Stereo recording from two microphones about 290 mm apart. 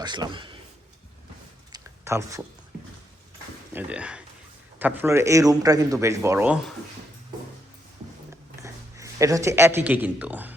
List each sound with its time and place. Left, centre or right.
0.0 s a man's voice: centre
1.7 s a sound: centre
3.7 s speech: centre
8.6 s speech: centre